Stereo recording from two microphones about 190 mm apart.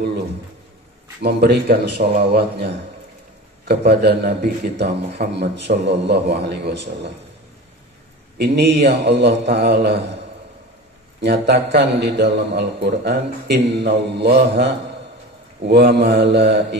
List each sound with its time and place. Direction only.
1.2 s a man's voice: 60° right (ahead or behind)
8.4 s a man's voice: 60° right (ahead or behind)
11.1 s a man's voice: 65° right (ahead or behind)